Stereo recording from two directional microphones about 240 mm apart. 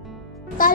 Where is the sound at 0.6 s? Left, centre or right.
Left.